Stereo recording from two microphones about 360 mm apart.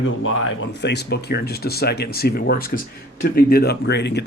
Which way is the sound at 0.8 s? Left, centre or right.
Left.